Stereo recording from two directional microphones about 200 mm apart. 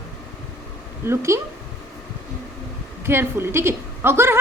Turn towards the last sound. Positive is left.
turn(degrees=-10)  # may be behind; listen again after turning